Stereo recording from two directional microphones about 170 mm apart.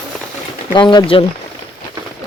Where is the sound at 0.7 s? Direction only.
30° left (ahead or behind).